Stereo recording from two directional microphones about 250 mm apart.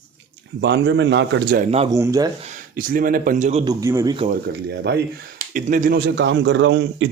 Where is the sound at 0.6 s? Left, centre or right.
Right.